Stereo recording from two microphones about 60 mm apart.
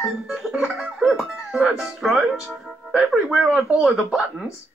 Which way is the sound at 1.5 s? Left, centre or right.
Right.